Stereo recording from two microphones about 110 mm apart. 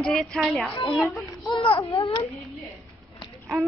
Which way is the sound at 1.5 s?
55° left (ahead or behind).